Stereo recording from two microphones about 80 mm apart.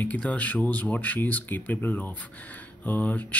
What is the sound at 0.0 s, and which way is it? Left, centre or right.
Speech, centre.